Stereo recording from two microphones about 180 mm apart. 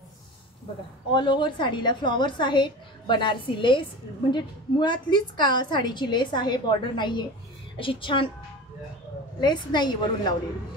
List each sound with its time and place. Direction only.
1.1 s a woman's voice: 25° left (ahead or behind)
9.4 s a woman's voice: 25° left (ahead or behind)